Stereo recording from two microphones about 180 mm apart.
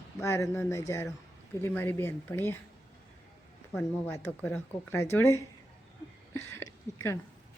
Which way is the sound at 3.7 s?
10° left (ahead or behind).